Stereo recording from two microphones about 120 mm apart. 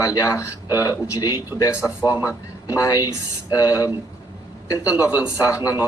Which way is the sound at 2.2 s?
30° left (ahead or behind).